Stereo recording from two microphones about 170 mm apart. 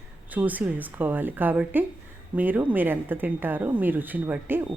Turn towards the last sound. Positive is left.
turn(degrees=-10)  # may be behind; listen again after turning